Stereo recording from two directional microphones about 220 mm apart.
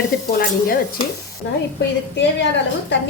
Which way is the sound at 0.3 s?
45° left (ahead or behind).